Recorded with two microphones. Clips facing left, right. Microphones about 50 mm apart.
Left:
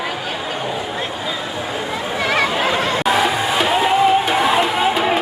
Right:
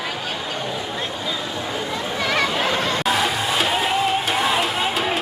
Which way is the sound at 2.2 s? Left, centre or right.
Left.